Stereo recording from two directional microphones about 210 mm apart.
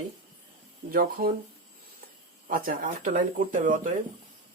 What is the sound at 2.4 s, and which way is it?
Speech, 40° right (ahead or behind).